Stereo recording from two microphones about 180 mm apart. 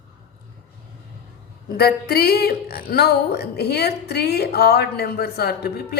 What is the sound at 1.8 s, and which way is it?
A woman's voice, 60° left (ahead or behind).